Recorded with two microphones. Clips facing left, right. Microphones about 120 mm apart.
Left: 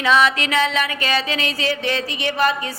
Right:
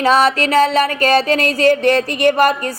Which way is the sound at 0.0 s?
40° right (ahead or behind).